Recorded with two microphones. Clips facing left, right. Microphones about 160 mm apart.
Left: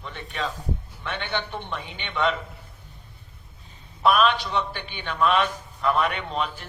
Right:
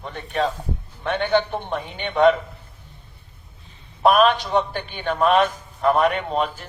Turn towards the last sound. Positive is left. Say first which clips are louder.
# right 5 dB
turn(degrees=-45)  # may be behind; listen again after turning